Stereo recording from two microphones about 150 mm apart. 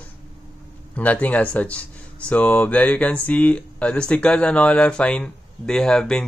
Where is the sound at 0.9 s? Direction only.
10° left (ahead or behind).